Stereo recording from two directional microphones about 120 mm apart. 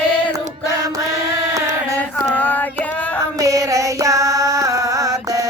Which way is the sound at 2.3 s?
15° left (ahead or behind).